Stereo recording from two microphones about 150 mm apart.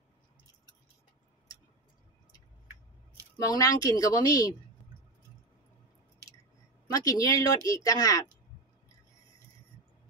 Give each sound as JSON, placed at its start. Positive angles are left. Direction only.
{"t": 3.5, "sound": "speech", "side_deg": 25}
{"t": 6.9, "sound": "speech", "side_deg": 25}